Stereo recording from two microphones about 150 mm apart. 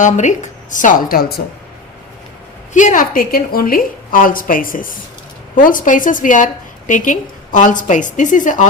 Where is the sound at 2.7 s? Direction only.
55° left (ahead or behind).